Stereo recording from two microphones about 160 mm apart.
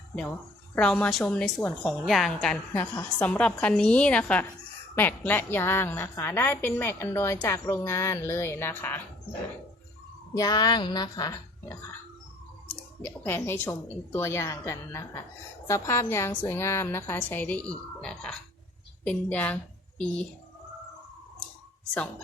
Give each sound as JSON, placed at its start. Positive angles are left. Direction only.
{"t": 0.8, "sound": "a woman's voice", "side_deg": 5}
{"t": 2.7, "sound": "a woman's voice", "side_deg": 15}
{"t": 10.3, "sound": "a woman's voice", "side_deg": 25}
{"t": 13.2, "sound": "a woman's voice", "side_deg": 15}